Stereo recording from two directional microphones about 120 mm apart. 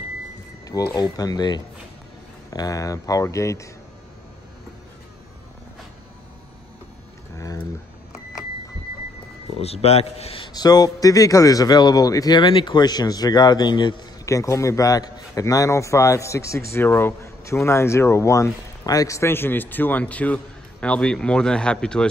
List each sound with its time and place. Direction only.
0.7 s a man's voice: 30° left (ahead or behind)
7.3 s a sound: 30° left (ahead or behind)
9.6 s speech: 55° left (ahead or behind)
10.5 s a man's voice: 35° left (ahead or behind)
14.2 s a man's voice: 25° left (ahead or behind); by 22.0 s 10° left (ahead or behind)